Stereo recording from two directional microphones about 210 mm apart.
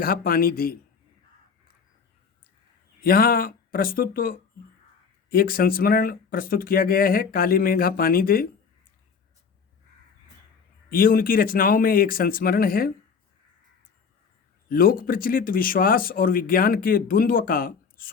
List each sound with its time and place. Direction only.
0.0 s speech: 45° left (ahead or behind)
3.0 s speech: 45° left (ahead or behind)
10.8 s speech: 40° left (ahead or behind)
14.7 s speech: 45° left (ahead or behind)